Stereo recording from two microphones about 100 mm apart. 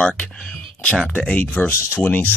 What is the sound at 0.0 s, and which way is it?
Speech, 10° left (ahead or behind).